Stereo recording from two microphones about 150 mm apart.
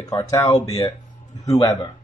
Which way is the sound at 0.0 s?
25° left (ahead or behind).